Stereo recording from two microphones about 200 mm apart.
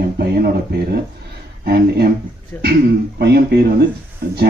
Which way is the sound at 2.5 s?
10° left (ahead or behind).